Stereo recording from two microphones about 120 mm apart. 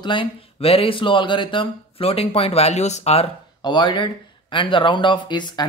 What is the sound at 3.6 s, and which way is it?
Speech, 40° left (ahead or behind).